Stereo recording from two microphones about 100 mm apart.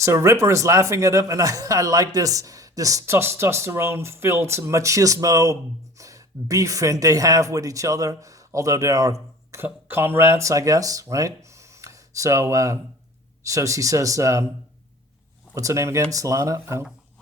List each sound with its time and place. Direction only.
0.0 s speech: 30° right (ahead or behind)
9.6 s speech: 20° right (ahead or behind)
15.5 s speech: 30° right (ahead or behind)